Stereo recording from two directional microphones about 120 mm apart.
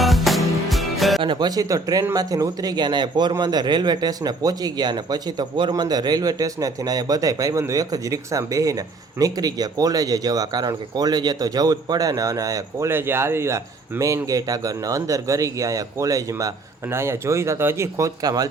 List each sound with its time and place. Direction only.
0.0 s music: centre (ahead or behind)
1.2 s speech: 40° right (ahead or behind)